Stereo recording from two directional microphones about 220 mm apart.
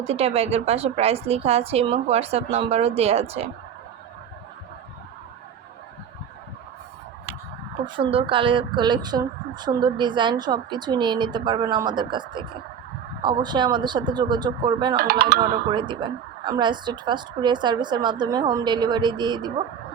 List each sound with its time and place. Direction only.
0.0 s speech: 30° right (ahead or behind)
7.9 s speech: 25° right (ahead or behind)
14.9 s speech: 45° right (ahead or behind)
15.4 s speech: 20° right (ahead or behind)